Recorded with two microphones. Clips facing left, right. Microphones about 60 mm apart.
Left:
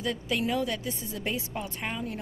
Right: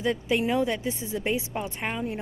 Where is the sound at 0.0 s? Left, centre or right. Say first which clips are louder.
Right 4 dB; right.